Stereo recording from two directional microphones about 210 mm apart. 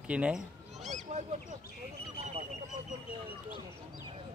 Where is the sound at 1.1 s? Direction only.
30° right (ahead or behind).